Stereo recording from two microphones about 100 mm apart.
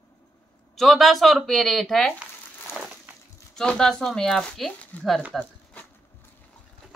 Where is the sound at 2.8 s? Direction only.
10° right (ahead or behind).